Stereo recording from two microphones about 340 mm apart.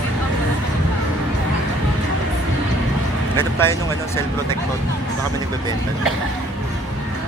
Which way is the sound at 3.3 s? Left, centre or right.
Centre.